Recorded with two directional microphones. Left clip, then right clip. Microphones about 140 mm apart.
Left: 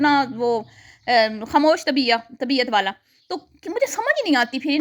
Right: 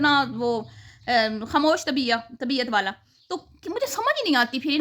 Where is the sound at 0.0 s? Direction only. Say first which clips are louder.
Left 3 dB; 20° left (ahead or behind).